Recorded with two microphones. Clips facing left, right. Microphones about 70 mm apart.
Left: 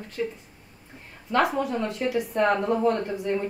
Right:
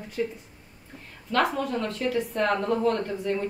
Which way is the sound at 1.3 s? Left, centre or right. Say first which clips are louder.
Left 1 dB; centre.